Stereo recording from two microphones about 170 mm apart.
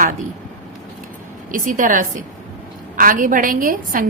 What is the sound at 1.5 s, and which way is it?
A woman's voice, 50° right (ahead or behind).